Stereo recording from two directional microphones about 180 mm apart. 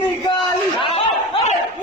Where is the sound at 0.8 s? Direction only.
30° left (ahead or behind).